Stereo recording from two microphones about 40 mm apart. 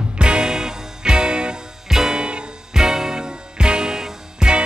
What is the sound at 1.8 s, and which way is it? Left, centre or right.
Music, centre.